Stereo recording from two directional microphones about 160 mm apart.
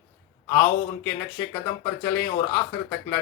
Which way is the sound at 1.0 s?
15° left (ahead or behind).